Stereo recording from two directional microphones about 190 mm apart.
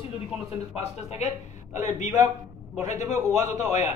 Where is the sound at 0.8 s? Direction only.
35° left (ahead or behind).